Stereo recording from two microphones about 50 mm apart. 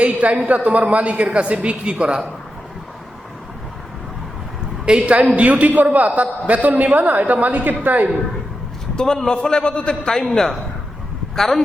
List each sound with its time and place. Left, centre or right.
0.0 s a woman's voice: right
4.9 s a woman's voice: right
9.0 s a man's voice: centre
10.1 s a man's voice: centre